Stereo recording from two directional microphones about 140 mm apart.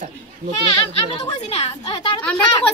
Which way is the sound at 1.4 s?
45° left (ahead or behind).